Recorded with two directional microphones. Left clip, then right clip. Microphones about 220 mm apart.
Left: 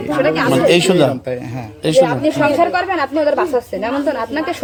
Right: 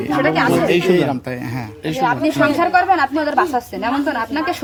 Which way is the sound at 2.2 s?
40° right (ahead or behind).